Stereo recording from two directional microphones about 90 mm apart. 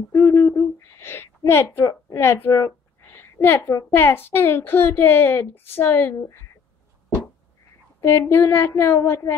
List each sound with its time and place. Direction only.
0.2 s a child's voice: 25° left (ahead or behind)
8.0 s a child's voice: 30° left (ahead or behind)